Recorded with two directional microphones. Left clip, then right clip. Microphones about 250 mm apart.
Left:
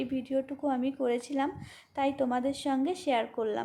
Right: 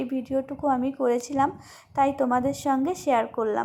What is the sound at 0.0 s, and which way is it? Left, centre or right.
Speech, centre.